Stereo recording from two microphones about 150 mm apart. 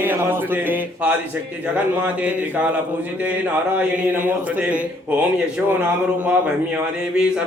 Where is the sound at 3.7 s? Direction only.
10° right (ahead or behind).